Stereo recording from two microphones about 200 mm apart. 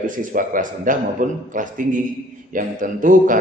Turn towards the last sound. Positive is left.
turn(degrees=-40)  # may be behind; listen again after turning